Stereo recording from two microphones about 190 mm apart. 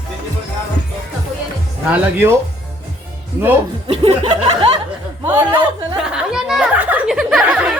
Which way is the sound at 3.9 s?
30° right (ahead or behind).